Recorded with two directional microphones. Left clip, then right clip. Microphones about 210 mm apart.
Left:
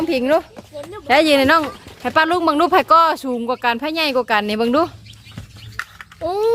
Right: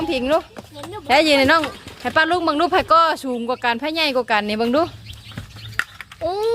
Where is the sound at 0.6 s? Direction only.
45° right (ahead or behind).